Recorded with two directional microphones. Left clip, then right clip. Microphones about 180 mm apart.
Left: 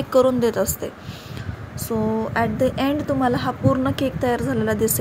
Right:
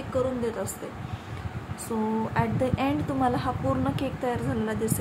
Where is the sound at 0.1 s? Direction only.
50° left (ahead or behind).